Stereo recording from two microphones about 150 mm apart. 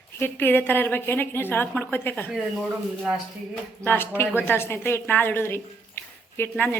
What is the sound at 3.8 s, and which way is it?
A woman's voice, 15° left (ahead or behind).